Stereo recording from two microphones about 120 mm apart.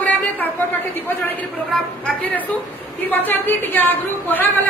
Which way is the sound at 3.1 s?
15° left (ahead or behind).